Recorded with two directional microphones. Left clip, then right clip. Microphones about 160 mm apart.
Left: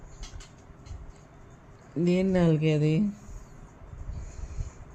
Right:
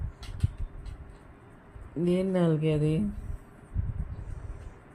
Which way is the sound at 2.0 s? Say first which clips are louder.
Left 2 dB; 25° left (ahead or behind).